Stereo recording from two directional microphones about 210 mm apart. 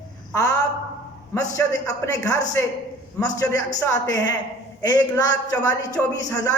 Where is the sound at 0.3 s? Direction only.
15° left (ahead or behind).